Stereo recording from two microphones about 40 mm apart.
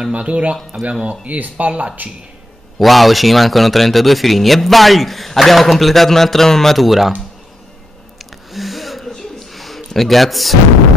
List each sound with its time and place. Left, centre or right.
0.1 s speech: right
2.8 s speech: centre
8.2 s a sound: centre